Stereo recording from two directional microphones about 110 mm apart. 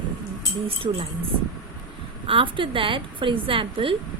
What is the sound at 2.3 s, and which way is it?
A woman's voice, 50° right (ahead or behind).